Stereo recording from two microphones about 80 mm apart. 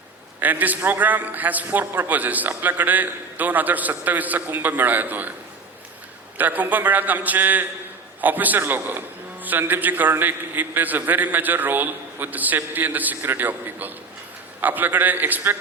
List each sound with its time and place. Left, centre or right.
0.3 s a man's voice: right
6.3 s a man's voice: right